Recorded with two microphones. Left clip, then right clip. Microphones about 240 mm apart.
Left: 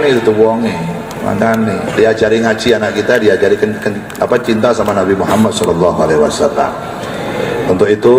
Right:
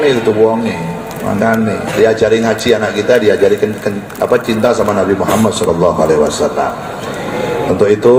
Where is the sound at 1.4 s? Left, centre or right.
Left.